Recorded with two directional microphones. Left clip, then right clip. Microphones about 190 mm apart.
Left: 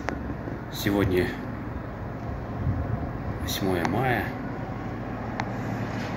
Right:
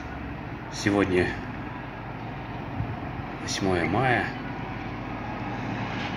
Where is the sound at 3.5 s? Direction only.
20° right (ahead or behind).